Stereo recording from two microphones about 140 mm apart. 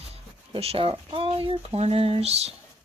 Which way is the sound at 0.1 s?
45° right (ahead or behind).